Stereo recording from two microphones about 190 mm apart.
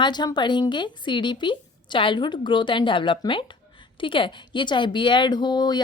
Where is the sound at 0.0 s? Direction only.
20° left (ahead or behind).